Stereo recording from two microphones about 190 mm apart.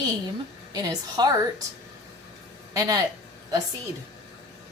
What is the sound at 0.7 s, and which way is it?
Speech, 20° right (ahead or behind).